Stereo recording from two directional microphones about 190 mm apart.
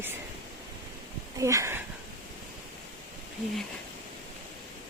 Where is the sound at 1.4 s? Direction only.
15° right (ahead or behind).